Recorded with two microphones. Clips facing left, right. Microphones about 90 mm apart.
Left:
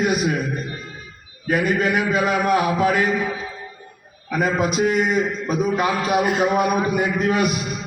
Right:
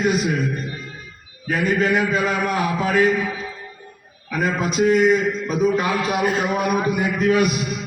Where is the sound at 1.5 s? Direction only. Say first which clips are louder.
Even; 10° left (ahead or behind).